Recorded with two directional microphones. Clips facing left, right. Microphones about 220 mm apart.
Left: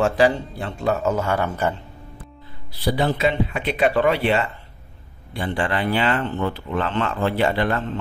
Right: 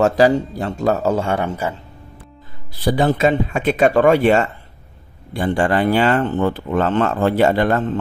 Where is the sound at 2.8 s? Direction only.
45° right (ahead or behind).